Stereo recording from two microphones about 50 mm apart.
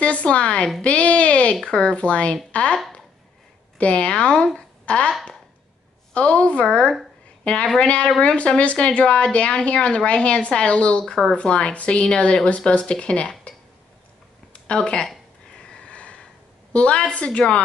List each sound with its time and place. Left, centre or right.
0.0 s speech: left
4.6 s a sound: left
6.1 s speech: left
11.1 s speech: centre
11.3 s speech: centre
15.5 s a sound: left
16.7 s speech: left